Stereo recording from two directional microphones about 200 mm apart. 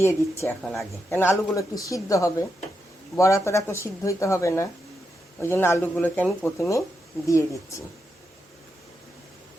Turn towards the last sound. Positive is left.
turn(degrees=15)  # may be behind; listen again after turning